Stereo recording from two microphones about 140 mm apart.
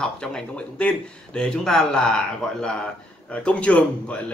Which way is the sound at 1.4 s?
5° left (ahead or behind).